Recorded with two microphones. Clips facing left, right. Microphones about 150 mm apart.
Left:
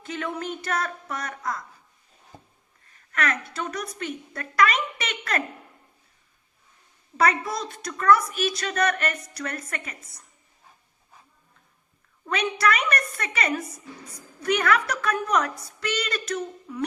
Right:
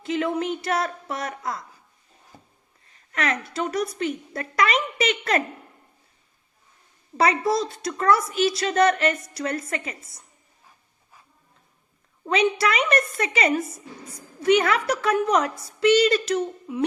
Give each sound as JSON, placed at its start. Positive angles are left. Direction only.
{"t": 0.0, "sound": "a woman's voice", "side_deg": -25}
{"t": 2.3, "sound": "a sound", "side_deg": 25}
{"t": 3.1, "sound": "a woman's voice", "side_deg": -25}
{"t": 7.2, "sound": "a woman's voice", "side_deg": -30}
{"t": 12.2, "sound": "a woman's voice", "side_deg": -30}